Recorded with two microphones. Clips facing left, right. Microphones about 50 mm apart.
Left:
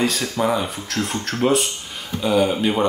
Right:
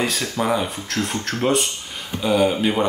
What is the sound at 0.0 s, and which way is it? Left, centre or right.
Speech, centre.